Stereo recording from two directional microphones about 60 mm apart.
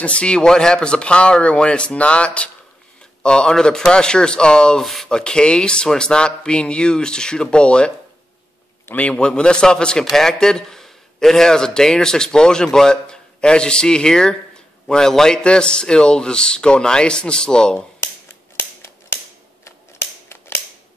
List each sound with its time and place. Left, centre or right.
0.0 s a man's voice: centre
4.8 s speech: centre
5.1 s a man's voice: centre
8.9 s a man's voice: centre
17.7 s scissors: left